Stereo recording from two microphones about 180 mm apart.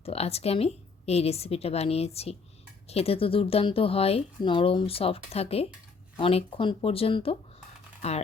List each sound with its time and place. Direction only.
0.0 s speech: 35° left (ahead or behind)